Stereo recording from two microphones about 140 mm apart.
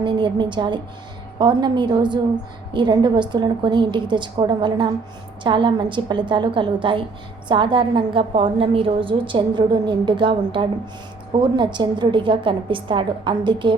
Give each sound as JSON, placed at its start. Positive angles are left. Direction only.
{"t": 0.0, "sound": "a woman's voice", "side_deg": -35}